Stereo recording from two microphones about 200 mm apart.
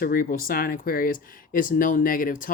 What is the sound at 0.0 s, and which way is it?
Speech, 45° left (ahead or behind).